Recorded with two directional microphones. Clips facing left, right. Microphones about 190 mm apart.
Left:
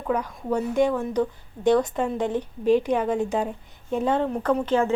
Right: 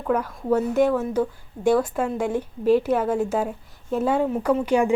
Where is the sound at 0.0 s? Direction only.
5° right (ahead or behind).